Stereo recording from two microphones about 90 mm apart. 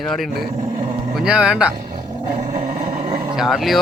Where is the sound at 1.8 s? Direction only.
45° right (ahead or behind).